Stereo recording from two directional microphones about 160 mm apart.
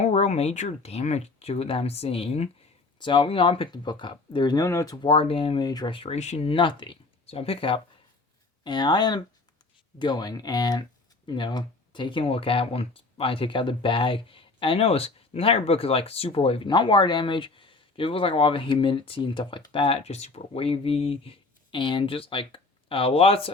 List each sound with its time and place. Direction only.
0.0 s speech: 45° left (ahead or behind); by 4.9 s 20° left (ahead or behind)
5.0 s speech: 35° left (ahead or behind)